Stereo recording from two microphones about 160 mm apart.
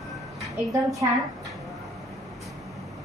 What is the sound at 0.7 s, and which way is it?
Speech, 20° right (ahead or behind).